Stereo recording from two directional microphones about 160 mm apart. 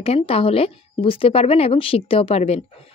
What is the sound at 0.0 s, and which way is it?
A woman's voice, 35° left (ahead or behind).